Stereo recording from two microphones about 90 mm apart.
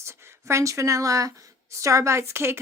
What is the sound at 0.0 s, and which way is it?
Speech, 30° right (ahead or behind).